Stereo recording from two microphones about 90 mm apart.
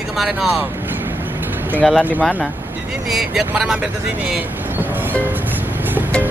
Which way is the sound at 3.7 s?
20° right (ahead or behind).